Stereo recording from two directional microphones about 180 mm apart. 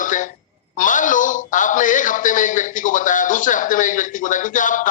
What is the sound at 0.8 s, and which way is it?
A man's voice, 45° left (ahead or behind).